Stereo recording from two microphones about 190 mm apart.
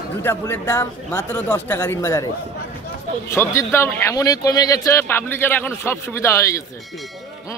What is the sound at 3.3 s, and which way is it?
A man's voice, 15° left (ahead or behind).